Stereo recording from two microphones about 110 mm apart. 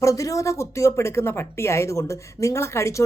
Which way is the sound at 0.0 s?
30° left (ahead or behind).